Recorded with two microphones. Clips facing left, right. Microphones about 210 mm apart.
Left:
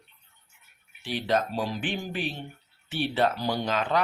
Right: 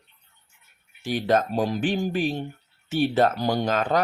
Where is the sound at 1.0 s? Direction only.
45° right (ahead or behind).